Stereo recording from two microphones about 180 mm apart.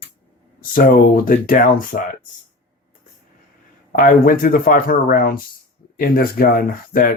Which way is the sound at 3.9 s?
50° left (ahead or behind).